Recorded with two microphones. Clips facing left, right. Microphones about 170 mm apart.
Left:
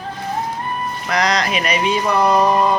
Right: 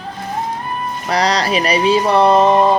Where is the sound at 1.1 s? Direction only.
35° right (ahead or behind).